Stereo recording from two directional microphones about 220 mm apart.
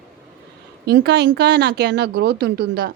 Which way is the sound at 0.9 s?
50° right (ahead or behind).